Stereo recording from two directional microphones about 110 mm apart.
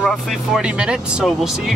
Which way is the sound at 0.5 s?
10° right (ahead or behind).